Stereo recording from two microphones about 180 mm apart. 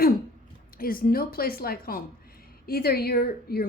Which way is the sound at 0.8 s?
55° left (ahead or behind).